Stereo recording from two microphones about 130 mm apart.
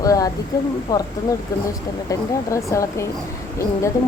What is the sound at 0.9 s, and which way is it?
Speech, 30° left (ahead or behind).